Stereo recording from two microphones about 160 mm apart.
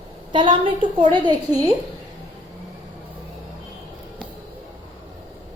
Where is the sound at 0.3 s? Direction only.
30° right (ahead or behind).